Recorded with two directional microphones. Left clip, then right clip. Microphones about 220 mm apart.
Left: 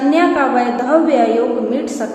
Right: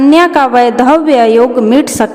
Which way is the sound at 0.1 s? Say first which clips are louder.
Right 5 dB; 50° right (ahead or behind).